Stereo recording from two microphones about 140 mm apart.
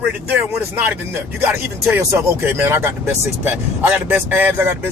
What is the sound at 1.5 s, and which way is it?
Speech, 20° right (ahead or behind).